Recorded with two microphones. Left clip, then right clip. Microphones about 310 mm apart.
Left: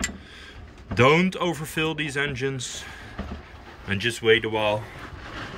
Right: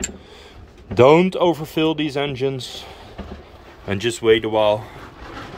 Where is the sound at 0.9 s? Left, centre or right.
Centre.